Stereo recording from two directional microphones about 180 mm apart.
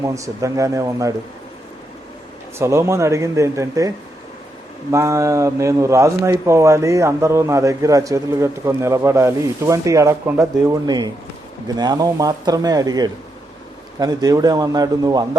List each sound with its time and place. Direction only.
0.0 s speech: 15° right (ahead or behind)
2.6 s a man's voice: 15° right (ahead or behind)